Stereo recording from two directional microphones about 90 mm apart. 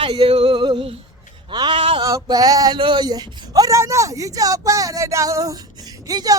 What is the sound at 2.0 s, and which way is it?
Speech, 45° right (ahead or behind).